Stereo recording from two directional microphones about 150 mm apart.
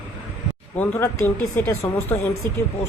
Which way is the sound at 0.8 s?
15° left (ahead or behind).